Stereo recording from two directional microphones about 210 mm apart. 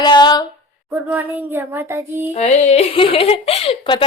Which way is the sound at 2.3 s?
30° left (ahead or behind).